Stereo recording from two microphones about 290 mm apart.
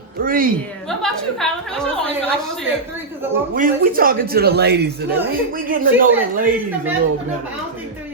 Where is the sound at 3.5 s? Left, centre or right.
Right.